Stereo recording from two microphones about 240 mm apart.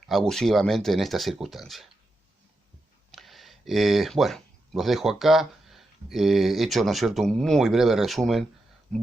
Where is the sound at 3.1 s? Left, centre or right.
Centre.